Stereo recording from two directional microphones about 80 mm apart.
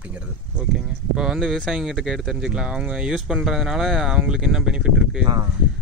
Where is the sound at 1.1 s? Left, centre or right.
Centre.